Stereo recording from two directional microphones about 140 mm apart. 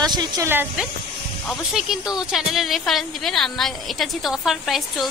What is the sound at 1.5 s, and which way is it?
A woman's voice, centre (ahead or behind).